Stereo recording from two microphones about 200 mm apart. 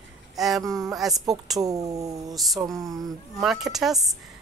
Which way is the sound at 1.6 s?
15° right (ahead or behind).